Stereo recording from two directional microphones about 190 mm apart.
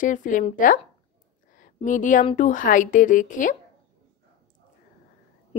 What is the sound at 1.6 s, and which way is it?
Speech, 45° left (ahead or behind).